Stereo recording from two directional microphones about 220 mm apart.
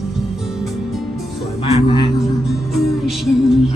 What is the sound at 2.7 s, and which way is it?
Music, centre (ahead or behind).